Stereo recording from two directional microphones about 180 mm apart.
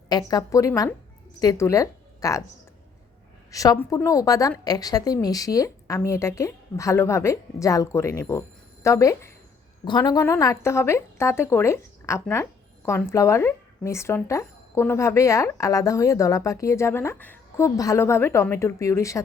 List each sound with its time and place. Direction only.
0.1 s a woman's voice: 20° left (ahead or behind)
3.5 s a woman's voice: 20° left (ahead or behind)